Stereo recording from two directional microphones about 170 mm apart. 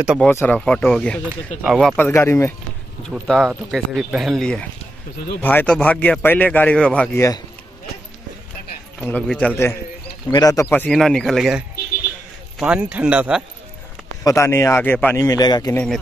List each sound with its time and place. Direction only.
0.3 s speech: 15° left (ahead or behind)
0.6 s speech: 5° left (ahead or behind)
3.1 s speech: centre (ahead or behind)
9.0 s speech: 5° left (ahead or behind)
10.3 s a man's voice: 20° left (ahead or behind)
10.7 s speech: 5° left (ahead or behind)
14.2 s speech: 15° left (ahead or behind)
15.2 s a man's voice: 25° left (ahead or behind)
15.7 s speech: 5° left (ahead or behind)